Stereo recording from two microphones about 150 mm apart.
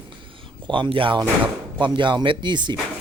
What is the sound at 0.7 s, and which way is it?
Speech, 30° right (ahead or behind).